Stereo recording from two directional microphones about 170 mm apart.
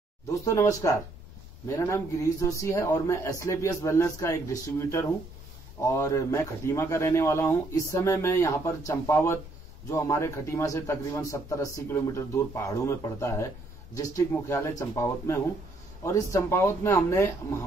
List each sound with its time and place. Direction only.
0.3 s a man's voice: 20° left (ahead or behind)